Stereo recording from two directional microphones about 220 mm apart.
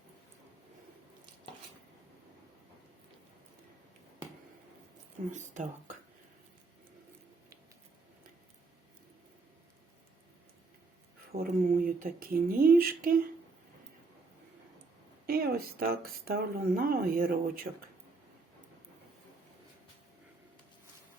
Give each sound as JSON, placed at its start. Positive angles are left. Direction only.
{"t": 5.3, "sound": "speech", "side_deg": -35}
{"t": 11.3, "sound": "speech", "side_deg": -40}
{"t": 15.3, "sound": "speech", "side_deg": -45}